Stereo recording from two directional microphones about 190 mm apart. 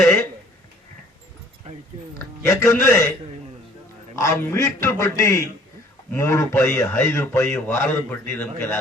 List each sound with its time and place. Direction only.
2.1 s a man's voice: 15° left (ahead or behind)
4.1 s a man's voice: 15° left (ahead or behind)